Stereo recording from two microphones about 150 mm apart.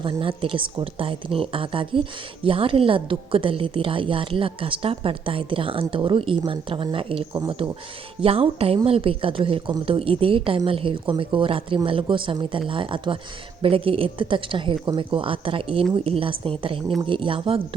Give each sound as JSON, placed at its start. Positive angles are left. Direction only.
{"t": 0.0, "sound": "speech", "side_deg": -35}
{"t": 7.3, "sound": "speech", "side_deg": -25}
{"t": 8.2, "sound": "speech", "side_deg": -40}